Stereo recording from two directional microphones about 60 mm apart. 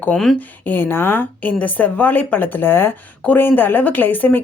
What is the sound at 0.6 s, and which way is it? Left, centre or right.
A woman's voice, left.